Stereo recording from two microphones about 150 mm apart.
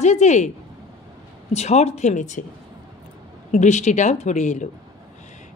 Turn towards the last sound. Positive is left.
turn(degrees=50)  # may be behind; listen again after turning